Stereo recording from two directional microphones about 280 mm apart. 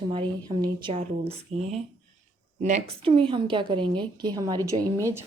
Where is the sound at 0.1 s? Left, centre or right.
Centre.